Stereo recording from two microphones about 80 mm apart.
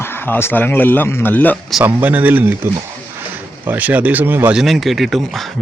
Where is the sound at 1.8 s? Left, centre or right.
Right.